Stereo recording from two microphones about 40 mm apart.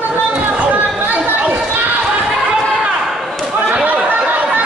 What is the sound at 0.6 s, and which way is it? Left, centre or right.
Chatter, right.